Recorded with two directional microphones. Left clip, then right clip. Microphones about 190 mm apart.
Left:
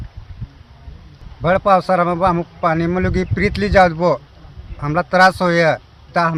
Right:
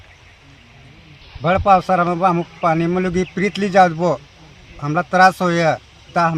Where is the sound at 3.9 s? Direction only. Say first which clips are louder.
Left 2 dB; 25° left (ahead or behind).